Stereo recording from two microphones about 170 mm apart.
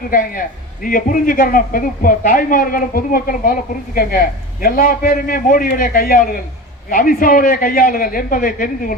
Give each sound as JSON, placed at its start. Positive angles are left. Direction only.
{"t": 0.1, "sound": "a man's voice", "side_deg": 55}